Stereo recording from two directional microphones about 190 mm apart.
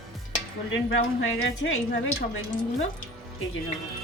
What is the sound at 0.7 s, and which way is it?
A woman's voice, 85° left.